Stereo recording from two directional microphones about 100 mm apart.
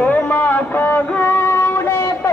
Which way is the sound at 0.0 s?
15° left (ahead or behind).